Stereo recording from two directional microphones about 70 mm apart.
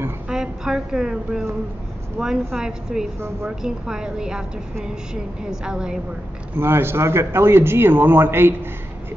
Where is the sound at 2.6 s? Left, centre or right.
Centre.